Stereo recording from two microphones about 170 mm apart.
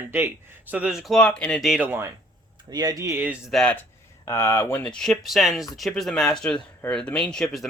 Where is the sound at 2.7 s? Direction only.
20° right (ahead or behind).